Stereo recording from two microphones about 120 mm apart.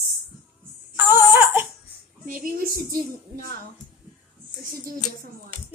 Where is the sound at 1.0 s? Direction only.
15° right (ahead or behind).